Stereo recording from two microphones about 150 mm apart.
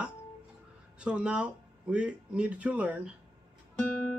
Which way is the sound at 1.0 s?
5° right (ahead or behind).